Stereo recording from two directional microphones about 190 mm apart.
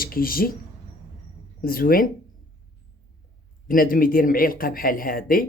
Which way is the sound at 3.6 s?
50° left (ahead or behind).